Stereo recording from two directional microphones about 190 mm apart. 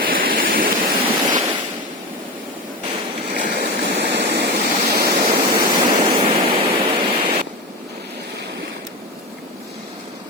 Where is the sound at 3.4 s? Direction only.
40° right (ahead or behind).